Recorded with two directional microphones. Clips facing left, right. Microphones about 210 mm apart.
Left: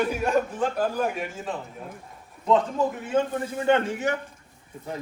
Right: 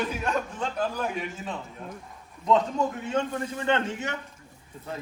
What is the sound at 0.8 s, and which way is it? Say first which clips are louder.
Speech: even; 50° left (ahead or behind).